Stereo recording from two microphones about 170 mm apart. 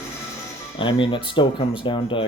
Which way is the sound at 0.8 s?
30° left (ahead or behind).